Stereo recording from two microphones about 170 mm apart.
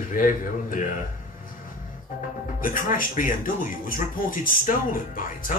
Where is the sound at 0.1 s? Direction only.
55° left (ahead or behind).